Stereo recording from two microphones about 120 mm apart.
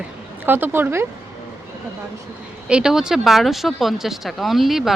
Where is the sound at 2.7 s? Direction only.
5° right (ahead or behind).